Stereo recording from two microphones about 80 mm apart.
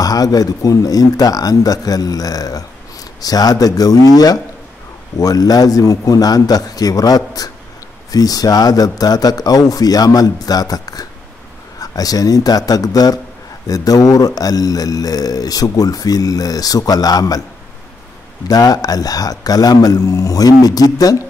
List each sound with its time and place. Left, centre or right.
0.0 s speech: left
18.5 s speech: left